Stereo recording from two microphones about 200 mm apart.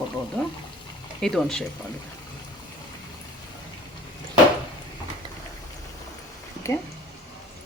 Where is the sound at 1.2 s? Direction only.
Centre (ahead or behind).